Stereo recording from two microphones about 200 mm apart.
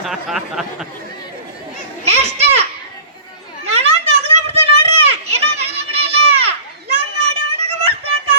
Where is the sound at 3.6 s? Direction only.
30° right (ahead or behind).